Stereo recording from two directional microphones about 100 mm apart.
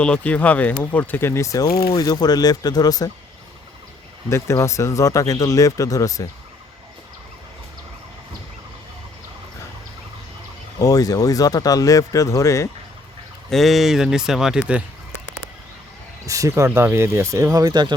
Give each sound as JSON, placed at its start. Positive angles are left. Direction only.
{"t": 0.0, "sound": "speech", "side_deg": 10}
{"t": 4.3, "sound": "speech", "side_deg": 30}
{"t": 10.8, "sound": "speech", "side_deg": 35}
{"t": 13.5, "sound": "speech", "side_deg": 0}
{"t": 16.2, "sound": "speech", "side_deg": -35}